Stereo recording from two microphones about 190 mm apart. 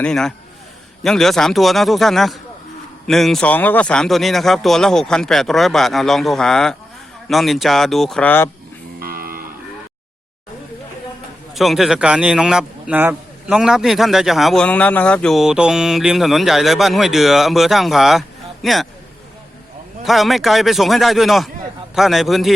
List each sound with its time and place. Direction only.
0.0 s a man's voice: 5° left (ahead or behind)
9.0 s cattle: 50° right (ahead or behind)
11.5 s a man's voice: centre (ahead or behind)
20.1 s a man's voice: centre (ahead or behind)